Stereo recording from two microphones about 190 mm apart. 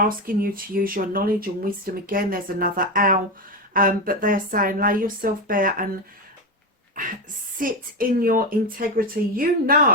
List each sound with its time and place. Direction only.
0.0 s speech: 50° right (ahead or behind)
7.6 s speech: 50° right (ahead or behind)